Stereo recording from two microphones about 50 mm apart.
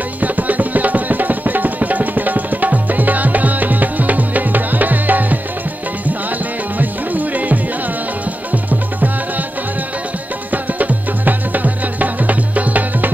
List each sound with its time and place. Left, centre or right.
0.2 s music: right
6.8 s music: right
10.5 s music: right